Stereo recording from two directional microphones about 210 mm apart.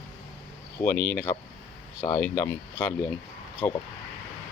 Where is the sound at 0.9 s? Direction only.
45° left (ahead or behind).